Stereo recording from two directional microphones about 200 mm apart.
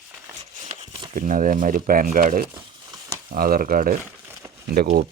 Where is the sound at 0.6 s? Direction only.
30° right (ahead or behind).